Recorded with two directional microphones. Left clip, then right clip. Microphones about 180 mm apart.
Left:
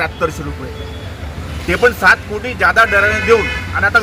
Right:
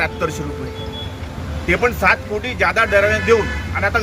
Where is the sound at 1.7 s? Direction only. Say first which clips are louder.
Left 5 dB; 20° right (ahead or behind).